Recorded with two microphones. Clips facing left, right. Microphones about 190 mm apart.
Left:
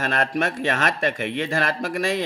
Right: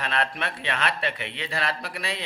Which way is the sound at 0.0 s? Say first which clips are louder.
Left 6 dB; 45° left (ahead or behind).